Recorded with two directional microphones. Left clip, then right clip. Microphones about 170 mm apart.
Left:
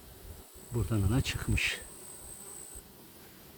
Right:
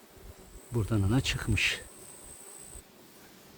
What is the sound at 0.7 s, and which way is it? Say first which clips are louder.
Insect: right 3 dB; 40° right (ahead or behind).